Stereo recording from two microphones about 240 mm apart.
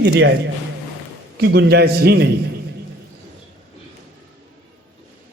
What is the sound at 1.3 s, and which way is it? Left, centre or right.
Speech, right.